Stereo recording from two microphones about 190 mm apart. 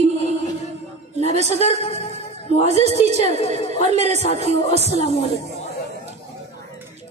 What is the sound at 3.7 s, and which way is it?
Speech, 35° right (ahead or behind).